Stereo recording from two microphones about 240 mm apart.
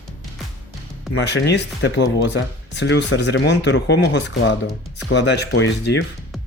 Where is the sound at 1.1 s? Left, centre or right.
Left.